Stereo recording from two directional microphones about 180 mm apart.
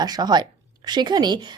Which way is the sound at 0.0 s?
25° right (ahead or behind).